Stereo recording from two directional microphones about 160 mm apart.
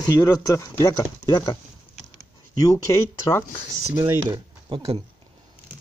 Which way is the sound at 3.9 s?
10° right (ahead or behind).